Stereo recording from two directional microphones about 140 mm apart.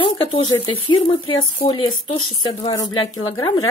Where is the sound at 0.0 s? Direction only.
35° left (ahead or behind).